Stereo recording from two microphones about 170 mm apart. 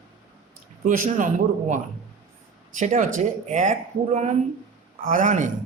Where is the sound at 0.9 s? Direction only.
50° right (ahead or behind).